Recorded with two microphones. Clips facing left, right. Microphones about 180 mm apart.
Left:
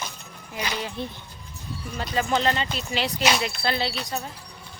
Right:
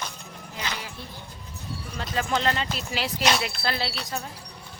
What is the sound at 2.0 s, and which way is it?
Speech, centre (ahead or behind).